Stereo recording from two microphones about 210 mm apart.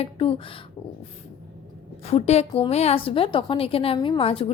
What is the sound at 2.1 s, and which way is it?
A woman's voice, 30° left (ahead or behind).